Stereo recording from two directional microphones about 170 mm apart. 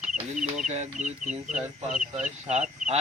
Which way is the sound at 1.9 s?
5° right (ahead or behind).